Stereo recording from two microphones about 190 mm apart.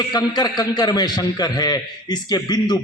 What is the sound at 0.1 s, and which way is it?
A man's voice, 20° left (ahead or behind).